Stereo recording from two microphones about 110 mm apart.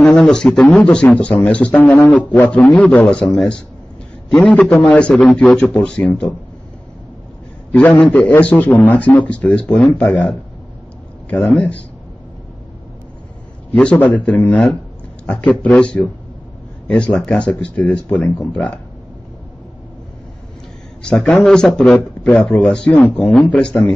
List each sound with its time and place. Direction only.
0.0 s a man's voice: 5° left (ahead or behind)
7.7 s speech: 15° left (ahead or behind)
13.7 s speech: 15° left (ahead or behind)
21.0 s speech: 5° left (ahead or behind)